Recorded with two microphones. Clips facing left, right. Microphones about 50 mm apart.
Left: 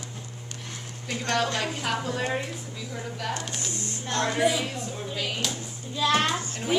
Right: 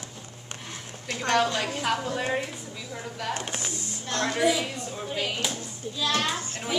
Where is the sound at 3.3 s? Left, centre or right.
Right.